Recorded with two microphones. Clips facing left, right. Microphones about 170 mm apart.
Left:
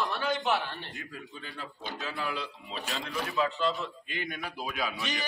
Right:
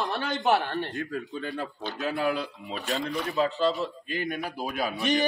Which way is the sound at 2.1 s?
50° right (ahead or behind).